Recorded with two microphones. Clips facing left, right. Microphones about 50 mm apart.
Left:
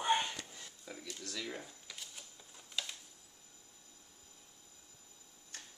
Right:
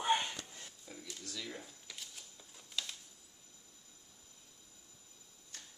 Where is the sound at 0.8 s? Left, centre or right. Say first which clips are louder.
Left 3 dB; left.